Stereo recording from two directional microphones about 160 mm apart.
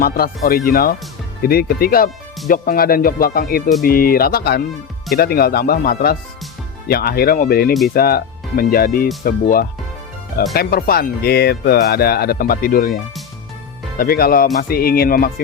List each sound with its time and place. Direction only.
0.0 s speech: 65° left (ahead or behind)
14.0 s speech: 70° left (ahead or behind)